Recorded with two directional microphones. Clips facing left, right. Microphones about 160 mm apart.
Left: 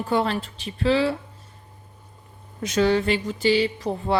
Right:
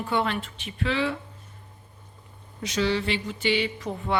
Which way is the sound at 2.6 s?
50° left (ahead or behind).